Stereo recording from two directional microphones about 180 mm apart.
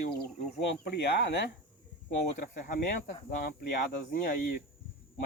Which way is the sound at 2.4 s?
55° left (ahead or behind).